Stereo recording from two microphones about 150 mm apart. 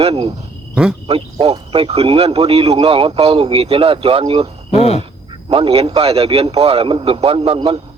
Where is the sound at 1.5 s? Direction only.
35° right (ahead or behind).